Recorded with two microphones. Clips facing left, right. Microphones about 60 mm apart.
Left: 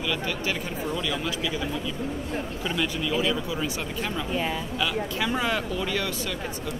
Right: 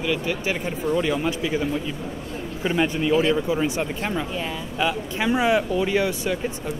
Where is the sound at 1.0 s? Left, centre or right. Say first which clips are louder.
Right 6 dB; right.